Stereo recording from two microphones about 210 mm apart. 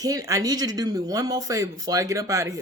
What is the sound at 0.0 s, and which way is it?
Speech, 15° right (ahead or behind).